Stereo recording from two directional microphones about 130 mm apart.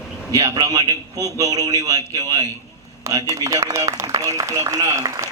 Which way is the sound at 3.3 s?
25° right (ahead or behind).